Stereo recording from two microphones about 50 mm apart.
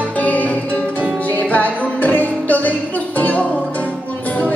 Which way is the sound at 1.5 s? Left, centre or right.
Left.